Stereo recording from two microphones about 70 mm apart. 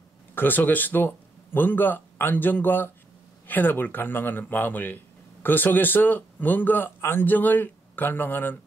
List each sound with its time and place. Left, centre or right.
0.3 s speech: left